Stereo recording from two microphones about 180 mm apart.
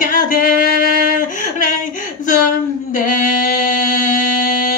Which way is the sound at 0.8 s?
50° left (ahead or behind).